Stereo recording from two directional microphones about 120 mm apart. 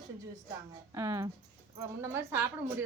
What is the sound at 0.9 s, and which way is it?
A woman's voice, 25° right (ahead or behind).